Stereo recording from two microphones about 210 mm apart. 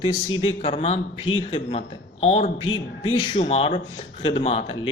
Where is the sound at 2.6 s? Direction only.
75° left (ahead or behind).